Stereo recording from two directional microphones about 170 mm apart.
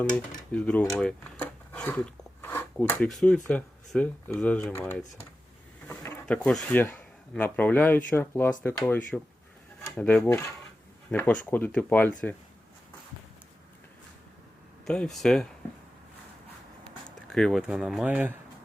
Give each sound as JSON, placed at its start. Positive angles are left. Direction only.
{"t": 0.5, "sound": "speech", "side_deg": 5}
{"t": 5.9, "sound": "a sound", "side_deg": 20}
{"t": 6.2, "sound": "speech", "side_deg": 5}
{"t": 14.8, "sound": "speech", "side_deg": 5}
{"t": 17.2, "sound": "speech", "side_deg": 5}